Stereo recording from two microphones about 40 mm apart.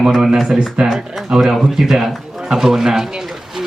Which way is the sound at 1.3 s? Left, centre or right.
Right.